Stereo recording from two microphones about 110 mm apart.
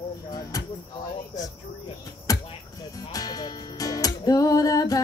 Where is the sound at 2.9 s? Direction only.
35° left (ahead or behind).